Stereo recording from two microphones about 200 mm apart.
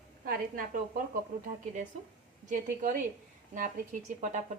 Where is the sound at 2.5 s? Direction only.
40° right (ahead or behind).